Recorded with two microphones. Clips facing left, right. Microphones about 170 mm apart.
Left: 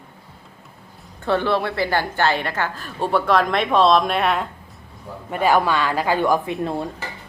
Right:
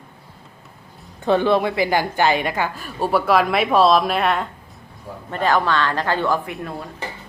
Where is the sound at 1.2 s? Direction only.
15° right (ahead or behind); by 4.5 s centre (ahead or behind).